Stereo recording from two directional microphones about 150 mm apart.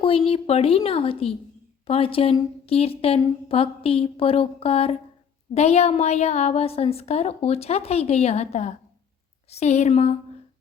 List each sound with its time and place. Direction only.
0.0 s a woman's voice: 40° left (ahead or behind)